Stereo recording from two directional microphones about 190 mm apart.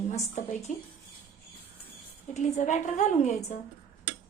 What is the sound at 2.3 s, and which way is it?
A woman's voice, 40° left (ahead or behind).